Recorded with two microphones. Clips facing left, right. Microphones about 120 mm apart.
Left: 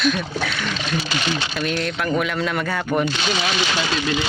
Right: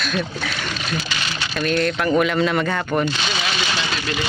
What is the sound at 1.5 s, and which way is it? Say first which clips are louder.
Speech: right 3 dB; 5° left (ahead or behind).